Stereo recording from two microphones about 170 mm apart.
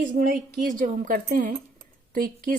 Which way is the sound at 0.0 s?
55° right (ahead or behind).